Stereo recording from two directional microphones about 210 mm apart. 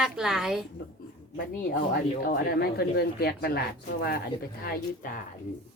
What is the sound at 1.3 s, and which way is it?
Speech, 45° left (ahead or behind).